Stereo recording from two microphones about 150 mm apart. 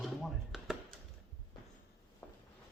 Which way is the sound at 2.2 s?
10° left (ahead or behind).